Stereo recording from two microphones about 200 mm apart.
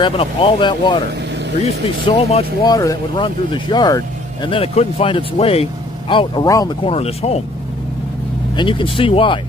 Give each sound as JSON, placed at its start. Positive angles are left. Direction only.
{"t": 0.0, "sound": "speech", "side_deg": 25}
{"t": 2.0, "sound": "speech", "side_deg": 30}
{"t": 2.6, "sound": "speech", "side_deg": 15}
{"t": 8.5, "sound": "speech", "side_deg": 25}